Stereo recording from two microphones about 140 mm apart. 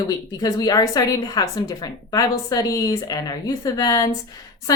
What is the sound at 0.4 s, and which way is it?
A woman's voice, 25° left (ahead or behind).